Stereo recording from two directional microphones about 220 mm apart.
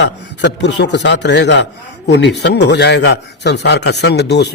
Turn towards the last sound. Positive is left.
turn(degrees=50)  # may be behind; listen again after turning